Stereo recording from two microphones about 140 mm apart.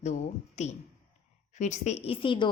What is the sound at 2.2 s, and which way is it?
Speech, 35° left (ahead or behind).